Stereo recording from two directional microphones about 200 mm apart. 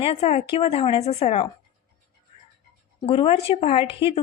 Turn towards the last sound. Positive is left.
turn(degrees=25)  # may be behind; listen again after turning